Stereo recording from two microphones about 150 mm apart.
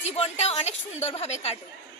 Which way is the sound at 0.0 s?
45° left (ahead or behind).